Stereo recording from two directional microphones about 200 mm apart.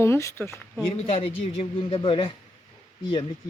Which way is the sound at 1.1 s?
30° left (ahead or behind).